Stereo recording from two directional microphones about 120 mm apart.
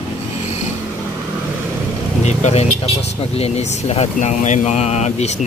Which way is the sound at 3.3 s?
60° left (ahead or behind).